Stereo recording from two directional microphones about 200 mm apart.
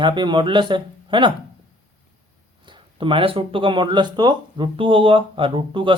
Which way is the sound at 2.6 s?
25° right (ahead or behind).